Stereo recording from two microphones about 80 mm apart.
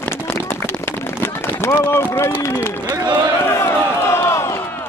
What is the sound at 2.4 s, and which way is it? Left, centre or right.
Speech, left.